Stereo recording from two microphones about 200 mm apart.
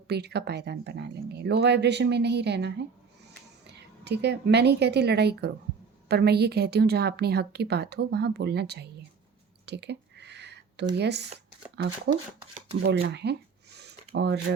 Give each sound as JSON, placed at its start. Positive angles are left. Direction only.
{"t": 0.1, "sound": "a woman's voice", "side_deg": -55}
{"t": 9.6, "sound": "a sound", "side_deg": -55}
{"t": 10.9, "sound": "a woman's voice", "side_deg": -55}
{"t": 12.8, "sound": "shuffling cards", "side_deg": -55}